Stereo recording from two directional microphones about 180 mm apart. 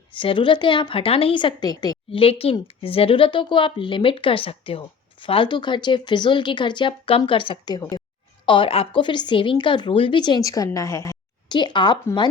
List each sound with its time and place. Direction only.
0.1 s a woman's voice: 30° left (ahead or behind)